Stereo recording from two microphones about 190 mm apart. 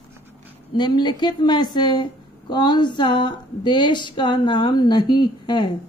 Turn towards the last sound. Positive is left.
turn(degrees=25)  # may be behind; listen again after turning